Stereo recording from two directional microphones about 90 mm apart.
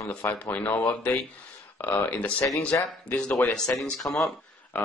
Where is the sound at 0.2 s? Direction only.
25° left (ahead or behind); by 4.3 s 5° left (ahead or behind).